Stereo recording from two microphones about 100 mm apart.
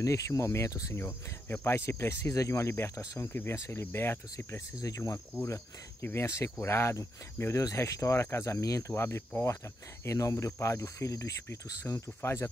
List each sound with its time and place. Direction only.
0.0 s speech: 30° left (ahead or behind)
0.9 s speech: 20° left (ahead or behind)